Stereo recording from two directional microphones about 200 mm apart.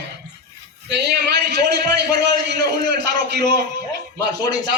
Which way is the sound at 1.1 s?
55° right (ahead or behind).